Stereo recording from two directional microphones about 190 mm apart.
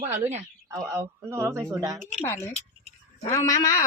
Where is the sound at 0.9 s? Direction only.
15° right (ahead or behind).